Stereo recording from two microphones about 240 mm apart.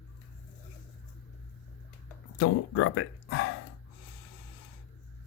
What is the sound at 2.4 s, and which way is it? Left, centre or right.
Speech, left.